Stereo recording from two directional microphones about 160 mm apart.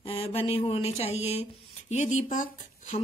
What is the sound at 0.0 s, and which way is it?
Speech, 35° left (ahead or behind).